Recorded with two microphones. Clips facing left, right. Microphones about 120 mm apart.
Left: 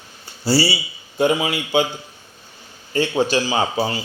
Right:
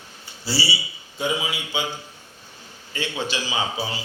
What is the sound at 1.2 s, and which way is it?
Speech, 60° left (ahead or behind).